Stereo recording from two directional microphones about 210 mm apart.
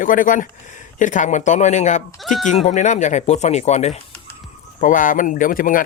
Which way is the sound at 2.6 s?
35° left (ahead or behind).